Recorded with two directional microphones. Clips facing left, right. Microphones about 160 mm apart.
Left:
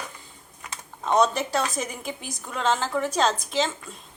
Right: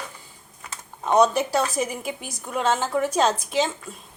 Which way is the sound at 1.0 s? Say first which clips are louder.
Right 3 dB; 10° right (ahead or behind).